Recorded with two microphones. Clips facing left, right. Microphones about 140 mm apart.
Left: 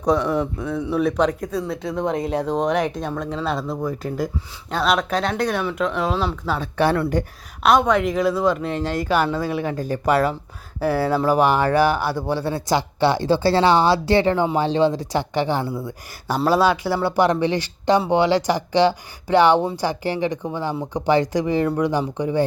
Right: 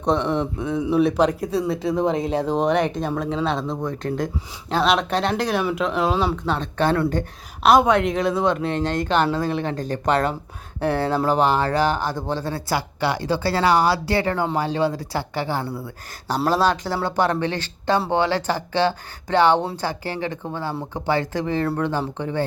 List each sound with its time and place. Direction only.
0.6 s speech: 10° right (ahead or behind); by 6.9 s 10° left (ahead or behind)
7.6 s speech: centre (ahead or behind); by 22.4 s 15° left (ahead or behind)